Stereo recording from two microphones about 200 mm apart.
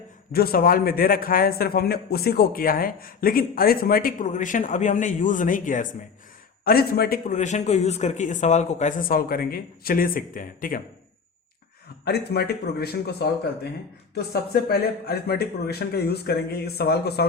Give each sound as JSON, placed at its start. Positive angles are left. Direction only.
{"t": 0.3, "sound": "a man's voice", "side_deg": 45}
{"t": 12.0, "sound": "a man's voice", "side_deg": 55}